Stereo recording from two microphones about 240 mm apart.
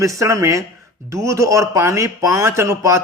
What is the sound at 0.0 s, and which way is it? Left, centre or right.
Speech, centre.